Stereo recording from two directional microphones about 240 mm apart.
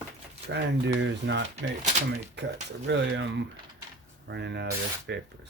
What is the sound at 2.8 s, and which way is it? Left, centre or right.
Speech, right.